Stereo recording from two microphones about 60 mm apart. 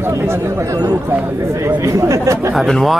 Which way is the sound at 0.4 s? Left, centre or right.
Right.